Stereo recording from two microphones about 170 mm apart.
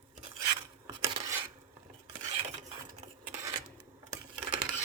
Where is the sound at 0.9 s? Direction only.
25° right (ahead or behind).